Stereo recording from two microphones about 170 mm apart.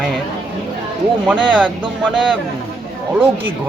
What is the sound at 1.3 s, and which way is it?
A man's voice, 5° right (ahead or behind).